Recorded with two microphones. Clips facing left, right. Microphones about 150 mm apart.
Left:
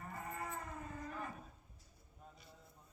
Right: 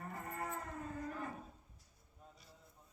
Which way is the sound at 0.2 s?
50° right (ahead or behind).